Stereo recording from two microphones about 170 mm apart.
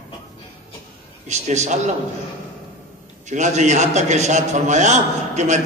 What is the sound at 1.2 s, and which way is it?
Speech, 40° right (ahead or behind).